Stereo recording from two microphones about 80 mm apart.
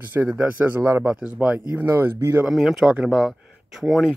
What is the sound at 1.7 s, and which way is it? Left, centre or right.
Speech, right.